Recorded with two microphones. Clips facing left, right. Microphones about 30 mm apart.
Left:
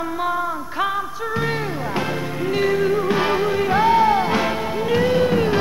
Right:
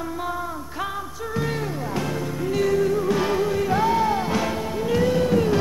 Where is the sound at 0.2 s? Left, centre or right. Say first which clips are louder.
Left 6 dB; left.